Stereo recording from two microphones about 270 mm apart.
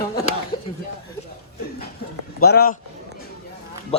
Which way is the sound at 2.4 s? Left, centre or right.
Left.